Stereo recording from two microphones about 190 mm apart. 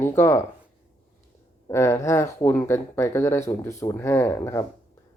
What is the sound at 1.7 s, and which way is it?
Speech, 15° left (ahead or behind).